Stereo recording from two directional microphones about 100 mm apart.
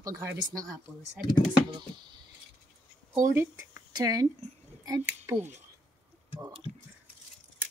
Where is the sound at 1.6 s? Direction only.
55° right (ahead or behind).